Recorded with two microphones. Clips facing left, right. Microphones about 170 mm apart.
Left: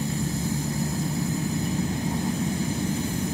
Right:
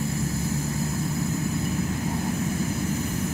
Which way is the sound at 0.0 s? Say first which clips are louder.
Even; 15° left (ahead or behind).